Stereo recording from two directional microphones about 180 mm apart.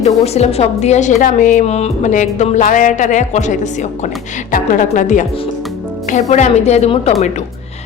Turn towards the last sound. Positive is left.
turn(degrees=35)  # may be behind; listen again after turning